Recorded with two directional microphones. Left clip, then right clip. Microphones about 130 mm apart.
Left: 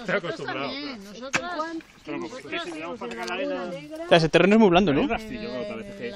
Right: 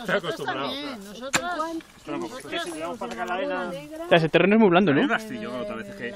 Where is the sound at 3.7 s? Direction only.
25° left (ahead or behind).